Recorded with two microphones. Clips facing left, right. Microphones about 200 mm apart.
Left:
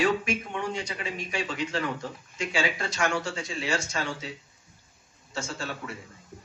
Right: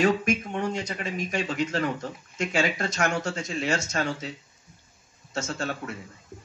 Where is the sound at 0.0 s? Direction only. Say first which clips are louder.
Right 3 dB; 45° right (ahead or behind).